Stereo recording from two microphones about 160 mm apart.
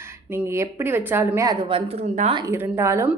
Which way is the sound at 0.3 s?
15° right (ahead or behind).